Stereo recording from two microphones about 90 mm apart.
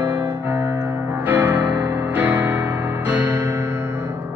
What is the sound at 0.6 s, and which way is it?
Music, 45° right (ahead or behind).